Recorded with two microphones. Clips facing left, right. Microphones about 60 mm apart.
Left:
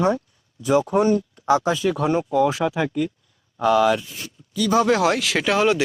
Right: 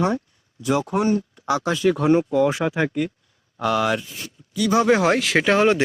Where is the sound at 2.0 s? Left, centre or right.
Right.